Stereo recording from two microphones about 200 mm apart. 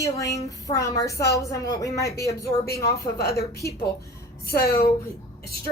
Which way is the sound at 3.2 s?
55° left (ahead or behind).